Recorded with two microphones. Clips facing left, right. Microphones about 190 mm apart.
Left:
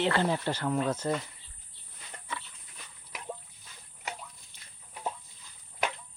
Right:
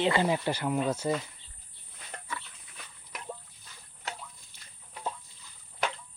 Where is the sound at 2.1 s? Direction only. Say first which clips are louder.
Right 5 dB; 60° right (ahead or behind).